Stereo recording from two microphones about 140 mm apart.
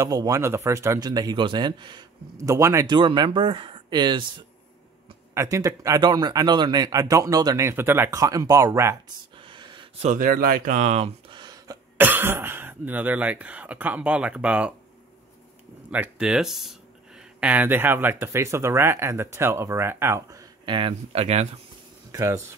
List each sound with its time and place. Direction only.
0.0 s speech: 25° right (ahead or behind)
2.9 s speech: 35° right (ahead or behind)
5.3 s speech: 20° right (ahead or behind)
9.4 s a sound: 35° right (ahead or behind)
10.0 s speech: 70° right (ahead or behind); by 11.1 s 55° right (ahead or behind)
11.2 s a sound: 30° right (ahead or behind)
12.0 s speech: 15° right (ahead or behind)
15.9 s speech: 10° right (ahead or behind); by 21.5 s 45° right (ahead or behind)
22.1 s speech: 25° right (ahead or behind)